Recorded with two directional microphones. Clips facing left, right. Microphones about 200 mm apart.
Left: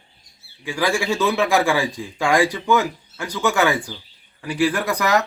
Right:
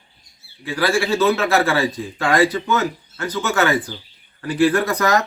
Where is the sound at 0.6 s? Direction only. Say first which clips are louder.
Right 2 dB; 15° left (ahead or behind).